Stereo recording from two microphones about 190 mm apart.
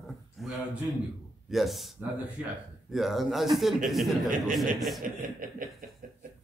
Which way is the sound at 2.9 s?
Centre (ahead or behind).